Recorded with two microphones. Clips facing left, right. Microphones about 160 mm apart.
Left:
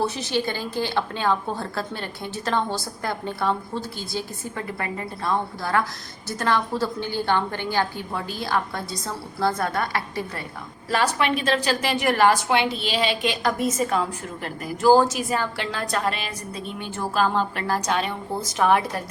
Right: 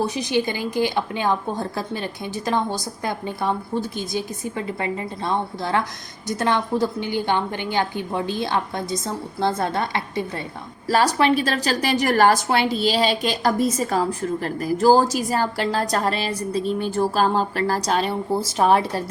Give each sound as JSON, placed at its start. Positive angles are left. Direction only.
{"t": 0.0, "sound": "a woman's voice", "side_deg": -15}
{"t": 10.8, "sound": "a woman's voice", "side_deg": -40}